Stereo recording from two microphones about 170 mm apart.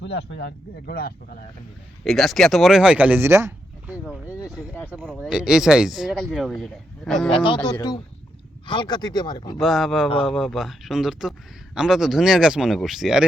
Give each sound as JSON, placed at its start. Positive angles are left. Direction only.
{"t": 0.0, "sound": "speech", "side_deg": 85}
{"t": 2.0, "sound": "speech", "side_deg": 0}
{"t": 4.6, "sound": "speech", "side_deg": 15}
{"t": 5.3, "sound": "speech", "side_deg": -5}
{"t": 7.3, "sound": "speech", "side_deg": 30}
{"t": 9.6, "sound": "speech", "side_deg": 0}